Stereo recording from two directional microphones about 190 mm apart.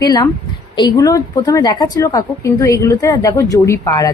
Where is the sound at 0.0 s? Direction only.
20° left (ahead or behind).